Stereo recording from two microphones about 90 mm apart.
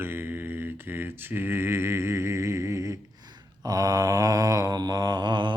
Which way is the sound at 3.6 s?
45° right (ahead or behind).